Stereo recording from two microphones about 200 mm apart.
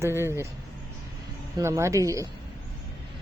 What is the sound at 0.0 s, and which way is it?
Speech, 10° right (ahead or behind).